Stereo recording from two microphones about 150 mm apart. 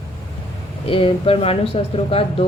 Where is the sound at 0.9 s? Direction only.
35° left (ahead or behind).